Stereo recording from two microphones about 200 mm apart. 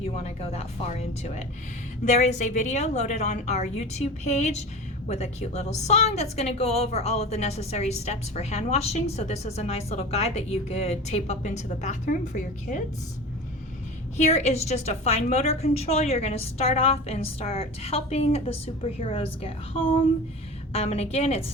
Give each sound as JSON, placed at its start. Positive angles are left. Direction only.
{"t": 0.0, "sound": "a woman's voice", "side_deg": 30}
{"t": 14.2, "sound": "a woman's voice", "side_deg": 35}